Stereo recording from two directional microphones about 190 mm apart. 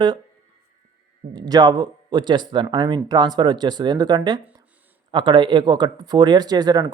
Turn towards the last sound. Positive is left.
turn(degrees=-20)  # may be behind; listen again after turning